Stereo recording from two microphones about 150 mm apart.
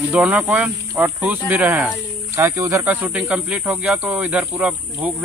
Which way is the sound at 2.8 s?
10° right (ahead or behind).